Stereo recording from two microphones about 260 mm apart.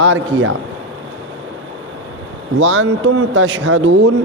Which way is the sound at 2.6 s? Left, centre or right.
Right.